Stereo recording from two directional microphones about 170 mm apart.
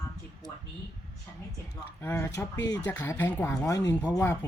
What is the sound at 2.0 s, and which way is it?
Speech, 15° left (ahead or behind).